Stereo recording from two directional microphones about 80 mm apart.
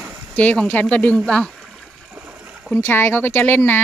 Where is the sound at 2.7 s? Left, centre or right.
Left.